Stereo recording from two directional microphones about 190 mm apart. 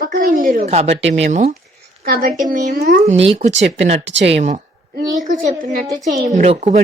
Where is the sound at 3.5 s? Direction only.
70° right (ahead or behind).